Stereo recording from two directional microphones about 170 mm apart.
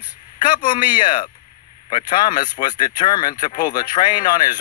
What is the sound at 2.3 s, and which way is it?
Speech, 50° left (ahead or behind).